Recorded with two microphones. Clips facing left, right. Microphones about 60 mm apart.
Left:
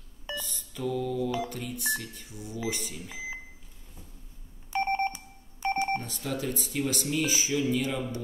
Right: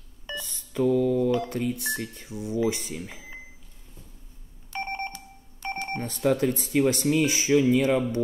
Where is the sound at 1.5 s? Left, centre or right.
Right.